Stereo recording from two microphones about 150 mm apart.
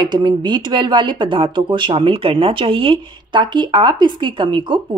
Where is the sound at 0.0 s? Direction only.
30° right (ahead or behind).